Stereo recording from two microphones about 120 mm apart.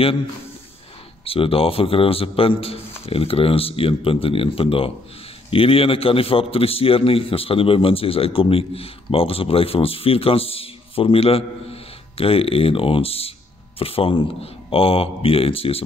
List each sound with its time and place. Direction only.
1.2 s a man's voice: 50° left (ahead or behind)